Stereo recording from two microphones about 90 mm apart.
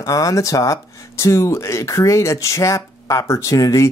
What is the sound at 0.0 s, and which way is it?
Speech, 40° left (ahead or behind).